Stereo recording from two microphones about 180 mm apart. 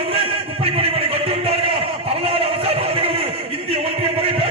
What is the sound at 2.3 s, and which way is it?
Music, 30° right (ahead or behind).